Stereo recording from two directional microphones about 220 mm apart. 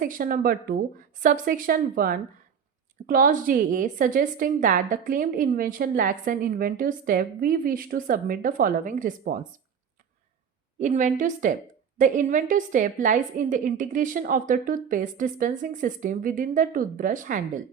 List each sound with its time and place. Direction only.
0.0 s a woman's voice: 40° right (ahead or behind)
10.8 s a woman's voice: 35° right (ahead or behind)